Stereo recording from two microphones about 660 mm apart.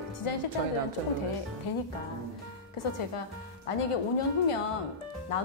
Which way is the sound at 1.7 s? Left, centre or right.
Left.